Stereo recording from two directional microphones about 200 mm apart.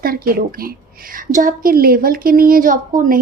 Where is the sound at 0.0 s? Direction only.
50° right (ahead or behind).